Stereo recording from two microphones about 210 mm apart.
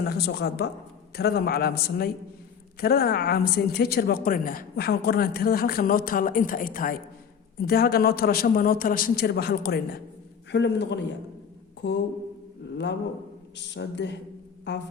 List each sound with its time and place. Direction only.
0.0 s a woman's voice: 50° left (ahead or behind)